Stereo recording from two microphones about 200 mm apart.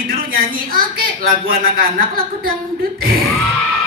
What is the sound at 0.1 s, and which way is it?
Music, 45° right (ahead or behind).